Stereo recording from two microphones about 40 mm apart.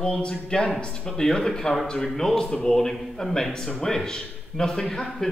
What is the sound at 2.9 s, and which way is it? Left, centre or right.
Speech, centre.